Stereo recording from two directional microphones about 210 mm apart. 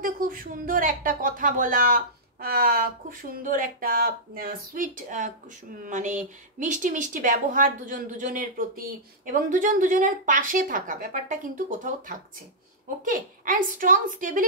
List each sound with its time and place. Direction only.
0.0 s speech: 40° right (ahead or behind)